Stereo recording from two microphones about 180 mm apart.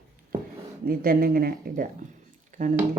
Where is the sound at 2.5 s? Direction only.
45° right (ahead or behind).